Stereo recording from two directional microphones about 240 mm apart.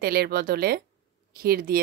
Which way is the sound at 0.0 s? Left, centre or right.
Right.